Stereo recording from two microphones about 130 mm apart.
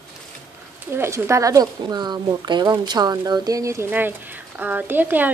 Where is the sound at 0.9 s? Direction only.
20° right (ahead or behind).